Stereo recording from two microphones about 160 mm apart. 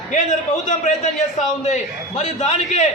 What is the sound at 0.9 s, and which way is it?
A man's voice, 50° left (ahead or behind).